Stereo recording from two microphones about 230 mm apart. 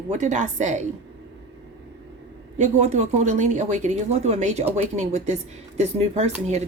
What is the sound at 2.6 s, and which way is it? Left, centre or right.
A woman's voice, right.